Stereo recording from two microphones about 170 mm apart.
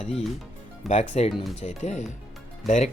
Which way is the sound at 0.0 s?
40° left (ahead or behind).